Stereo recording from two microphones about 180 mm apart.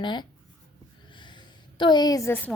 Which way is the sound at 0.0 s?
25° left (ahead or behind).